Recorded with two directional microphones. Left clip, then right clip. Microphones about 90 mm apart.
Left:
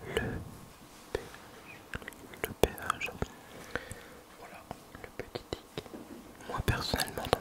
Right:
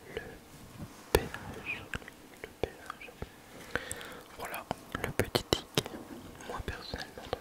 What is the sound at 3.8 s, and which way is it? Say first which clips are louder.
Whispering: right 5 dB; 30° right (ahead or behind).